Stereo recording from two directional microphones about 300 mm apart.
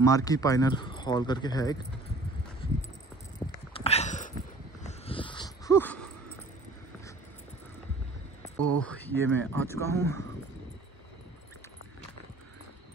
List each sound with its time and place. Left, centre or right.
0.0 s speech: centre
3.7 s a sound: centre
4.8 s dog: centre
8.7 s speech: centre